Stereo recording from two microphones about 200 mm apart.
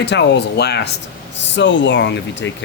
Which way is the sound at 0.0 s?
60° left (ahead or behind).